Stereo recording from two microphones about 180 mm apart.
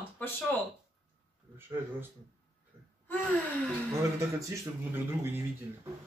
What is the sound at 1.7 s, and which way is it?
Speech, 10° right (ahead or behind).